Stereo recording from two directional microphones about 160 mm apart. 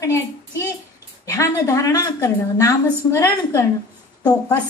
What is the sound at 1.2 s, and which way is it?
A woman's voice, 20° left (ahead or behind).